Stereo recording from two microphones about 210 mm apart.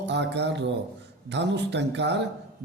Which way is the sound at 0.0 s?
55° right (ahead or behind).